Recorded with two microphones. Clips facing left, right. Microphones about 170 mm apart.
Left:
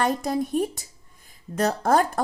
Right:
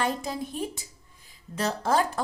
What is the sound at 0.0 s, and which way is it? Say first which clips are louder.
A woman's voice: left 5 dB; 45° left (ahead or behind).